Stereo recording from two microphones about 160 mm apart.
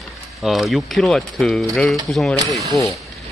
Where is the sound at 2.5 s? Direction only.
20° left (ahead or behind).